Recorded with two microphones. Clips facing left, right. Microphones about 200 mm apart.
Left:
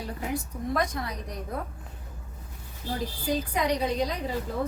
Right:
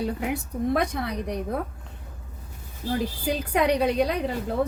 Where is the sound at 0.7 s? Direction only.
65° right (ahead or behind).